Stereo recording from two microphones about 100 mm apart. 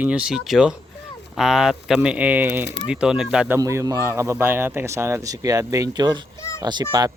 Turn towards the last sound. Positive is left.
turn(degrees=-40)  # may be behind; listen again after turning